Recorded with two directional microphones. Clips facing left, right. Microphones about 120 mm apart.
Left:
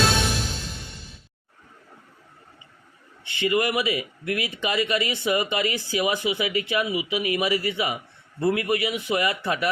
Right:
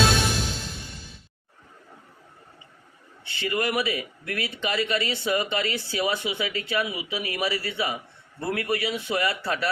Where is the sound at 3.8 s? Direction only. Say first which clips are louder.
Left 3 dB; 40° right (ahead or behind).